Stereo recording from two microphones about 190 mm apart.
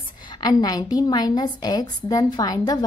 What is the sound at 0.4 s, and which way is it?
A woman's voice, 20° left (ahead or behind).